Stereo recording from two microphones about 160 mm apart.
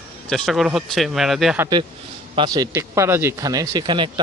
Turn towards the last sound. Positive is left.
turn(degrees=-30)  # may be behind; listen again after turning